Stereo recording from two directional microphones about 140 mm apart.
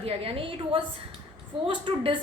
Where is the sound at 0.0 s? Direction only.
40° right (ahead or behind).